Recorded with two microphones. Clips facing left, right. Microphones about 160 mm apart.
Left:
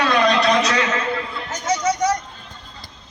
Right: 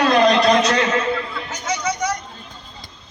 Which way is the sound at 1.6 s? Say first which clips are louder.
Left 4 dB; 40° left (ahead or behind).